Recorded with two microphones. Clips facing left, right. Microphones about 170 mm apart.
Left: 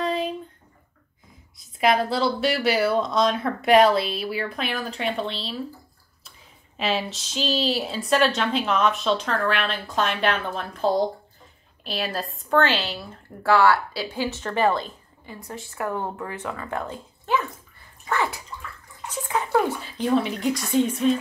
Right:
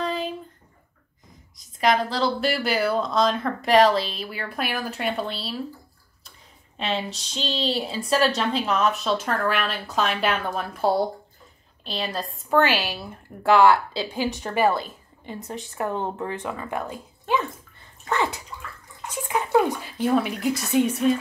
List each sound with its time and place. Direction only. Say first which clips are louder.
0.0 s a sound: left 2 dB; centre (ahead or behind)
1.6 s speech: left 1 dB; 5° left (ahead or behind)
4.6 s speech: even; 5° right (ahead or behind)
6.8 s speech: left 2 dB; 5° left (ahead or behind)
11.8 s speech: left 1 dB; 5° left (ahead or behind)
12.4 s a woman's voice: right 1 dB; 10° right (ahead or behind)
15.2 s speech: right 3 dB; 20° right (ahead or behind)